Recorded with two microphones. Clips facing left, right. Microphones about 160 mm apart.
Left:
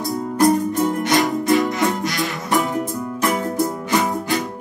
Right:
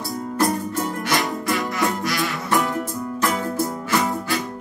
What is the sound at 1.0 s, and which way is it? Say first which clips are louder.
Music: left 5 dB; 20° left (ahead or behind).